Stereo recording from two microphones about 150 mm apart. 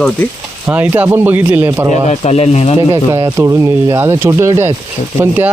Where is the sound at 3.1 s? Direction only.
20° right (ahead or behind).